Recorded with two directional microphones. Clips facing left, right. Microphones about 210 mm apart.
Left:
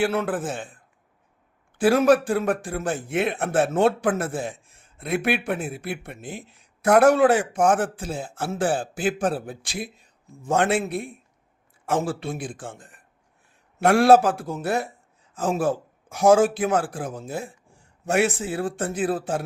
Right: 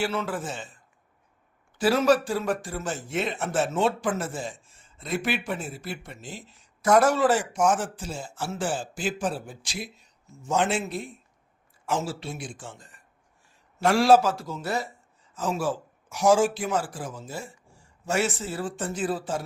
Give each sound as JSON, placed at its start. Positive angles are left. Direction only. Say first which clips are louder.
{"t": 0.0, "sound": "speech", "louder": "left 5 dB", "side_deg": 55}
{"t": 1.8, "sound": "speech", "louder": "left 4 dB", "side_deg": 55}